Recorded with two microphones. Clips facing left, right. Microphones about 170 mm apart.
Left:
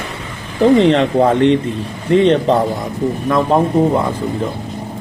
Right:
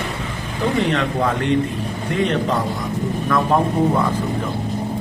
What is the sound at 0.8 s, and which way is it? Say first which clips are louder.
A man's voice: left 8 dB; 30° left (ahead or behind).